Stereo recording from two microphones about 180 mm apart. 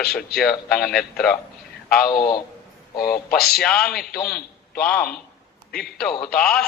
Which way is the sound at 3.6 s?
5° left (ahead or behind).